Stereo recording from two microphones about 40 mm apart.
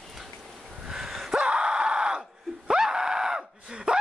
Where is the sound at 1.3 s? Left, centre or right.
Right.